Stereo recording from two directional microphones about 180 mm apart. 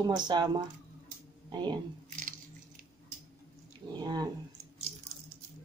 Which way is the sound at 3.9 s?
20° right (ahead or behind).